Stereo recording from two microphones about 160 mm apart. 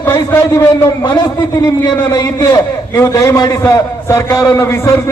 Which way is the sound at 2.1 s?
20° left (ahead or behind).